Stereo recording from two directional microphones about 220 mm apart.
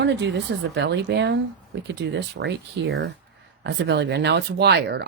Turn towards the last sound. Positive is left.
turn(degrees=-50)  # may be behind; listen again after turning